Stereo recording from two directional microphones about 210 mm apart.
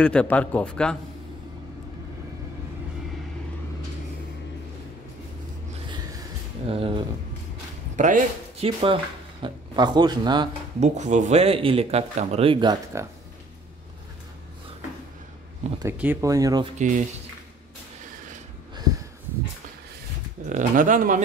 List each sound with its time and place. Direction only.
0.0 s a man's voice: 5° left (ahead or behind)
5.9 s a sound: 20° right (ahead or behind)
6.7 s speech: 25° right (ahead or behind)
10.8 s speech: 35° right (ahead or behind); by 13.1 s 15° right (ahead or behind)
15.8 s speech: 10° right (ahead or behind)
16.7 s speech: 35° right (ahead or behind)
20.4 s speech: 40° right (ahead or behind)